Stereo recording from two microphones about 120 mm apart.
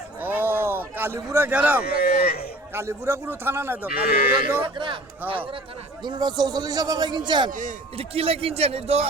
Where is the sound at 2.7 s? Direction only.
20° right (ahead or behind).